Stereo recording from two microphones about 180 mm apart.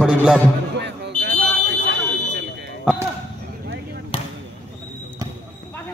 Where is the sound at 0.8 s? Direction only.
70° right (ahead or behind).